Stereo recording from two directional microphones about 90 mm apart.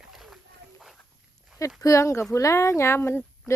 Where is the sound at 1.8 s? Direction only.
35° left (ahead or behind).